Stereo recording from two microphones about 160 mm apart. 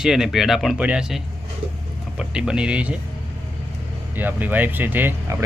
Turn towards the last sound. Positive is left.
turn(degrees=-10)  # may be behind; listen again after turning